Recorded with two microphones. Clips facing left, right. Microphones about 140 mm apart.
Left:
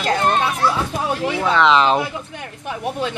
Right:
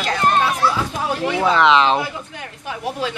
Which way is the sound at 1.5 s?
5° right (ahead or behind).